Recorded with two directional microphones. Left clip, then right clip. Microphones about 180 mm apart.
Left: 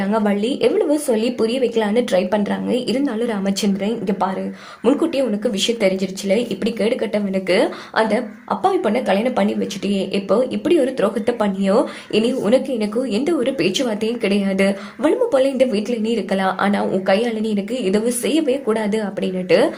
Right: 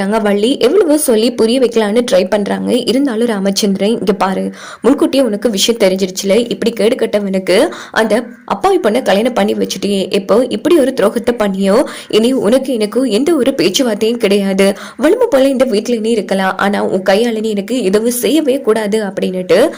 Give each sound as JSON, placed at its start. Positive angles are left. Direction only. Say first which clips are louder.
{"t": 0.0, "sound": "speech", "louder": "right 7 dB", "side_deg": -40}